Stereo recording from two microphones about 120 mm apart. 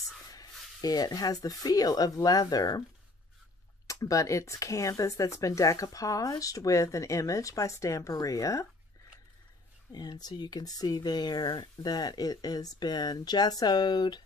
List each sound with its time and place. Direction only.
0.3 s speech: 30° left (ahead or behind)
3.8 s speech: 30° left (ahead or behind)
9.9 s speech: 35° left (ahead or behind)